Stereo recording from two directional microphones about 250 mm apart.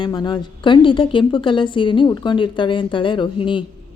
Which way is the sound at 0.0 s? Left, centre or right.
Centre.